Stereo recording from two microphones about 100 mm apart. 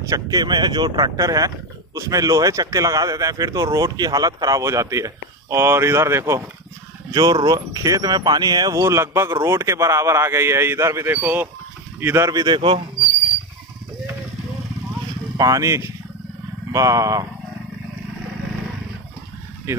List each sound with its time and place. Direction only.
0.1 s speech: 40° right (ahead or behind)
7.1 s a man's voice: 40° right (ahead or behind)
12.4 s speech: 50° right (ahead or behind)
15.3 s speech: 35° right (ahead or behind)